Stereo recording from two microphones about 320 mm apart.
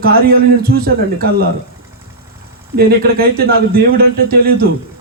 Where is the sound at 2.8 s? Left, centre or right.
Right.